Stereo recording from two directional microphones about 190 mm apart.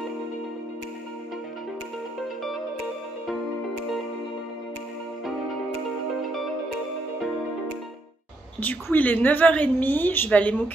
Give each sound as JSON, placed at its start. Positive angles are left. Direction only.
{"t": 8.5, "sound": "a woman's voice", "side_deg": 10}